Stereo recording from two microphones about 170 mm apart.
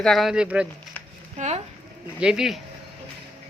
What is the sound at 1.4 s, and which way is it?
Speech, 45° right (ahead or behind).